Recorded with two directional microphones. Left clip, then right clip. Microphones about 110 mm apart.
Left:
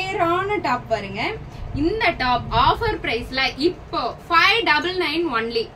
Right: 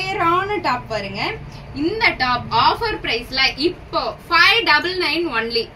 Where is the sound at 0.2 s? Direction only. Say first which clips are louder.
Right 3 dB; 5° left (ahead or behind).